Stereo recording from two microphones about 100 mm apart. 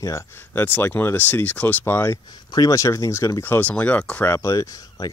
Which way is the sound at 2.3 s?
40° left (ahead or behind).